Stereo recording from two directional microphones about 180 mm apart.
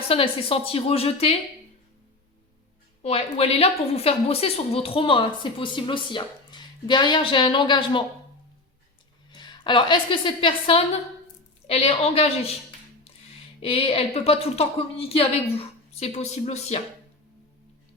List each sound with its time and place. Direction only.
0.1 s speech: 30° left (ahead or behind)
3.0 s a woman's voice: 35° left (ahead or behind)
9.3 s a woman's voice: 25° left (ahead or behind)
13.6 s speech: 30° left (ahead or behind)